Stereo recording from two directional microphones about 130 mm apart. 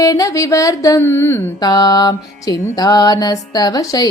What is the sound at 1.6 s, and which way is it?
Music, 30° left (ahead or behind).